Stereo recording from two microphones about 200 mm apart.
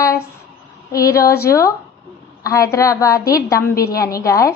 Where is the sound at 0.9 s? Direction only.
15° left (ahead or behind).